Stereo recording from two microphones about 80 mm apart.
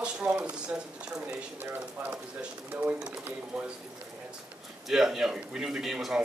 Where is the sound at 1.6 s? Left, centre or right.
Right; by 3.7 s centre.